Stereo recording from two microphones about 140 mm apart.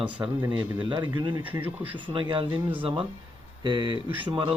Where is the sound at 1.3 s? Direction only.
10° right (ahead or behind).